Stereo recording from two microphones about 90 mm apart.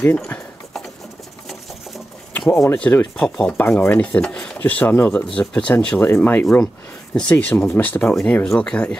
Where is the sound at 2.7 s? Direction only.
15° left (ahead or behind).